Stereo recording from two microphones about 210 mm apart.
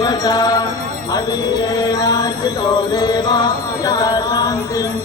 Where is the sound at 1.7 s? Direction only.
15° left (ahead or behind).